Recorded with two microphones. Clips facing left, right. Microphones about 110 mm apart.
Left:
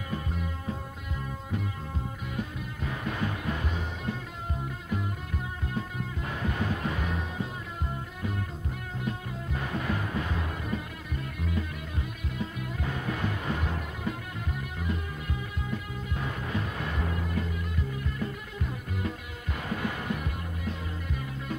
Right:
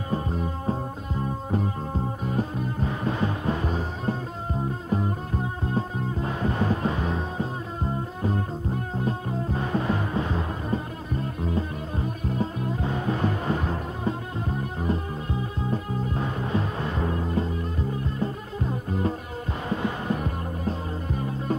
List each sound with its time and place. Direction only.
0.1 s music: 35° right (ahead or behind)